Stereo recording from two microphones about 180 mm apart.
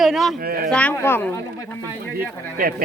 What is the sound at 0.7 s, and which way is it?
Speech, 10° left (ahead or behind).